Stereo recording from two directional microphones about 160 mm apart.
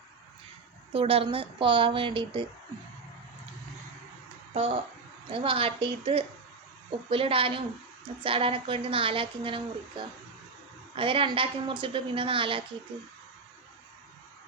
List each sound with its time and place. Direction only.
0.9 s a woman's voice: 35° right (ahead or behind)
4.5 s a woman's voice: 40° right (ahead or behind)